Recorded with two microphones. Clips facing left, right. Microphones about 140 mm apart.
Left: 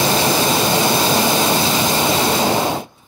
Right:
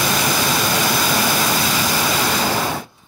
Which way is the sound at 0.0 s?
25° left (ahead or behind).